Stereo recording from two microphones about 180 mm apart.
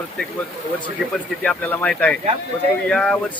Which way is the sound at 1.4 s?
5° left (ahead or behind).